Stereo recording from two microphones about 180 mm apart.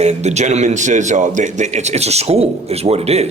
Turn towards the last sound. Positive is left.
turn(degrees=-35)  # may be behind; listen again after turning